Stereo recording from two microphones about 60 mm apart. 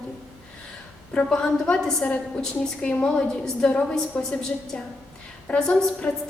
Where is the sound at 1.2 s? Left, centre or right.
Centre.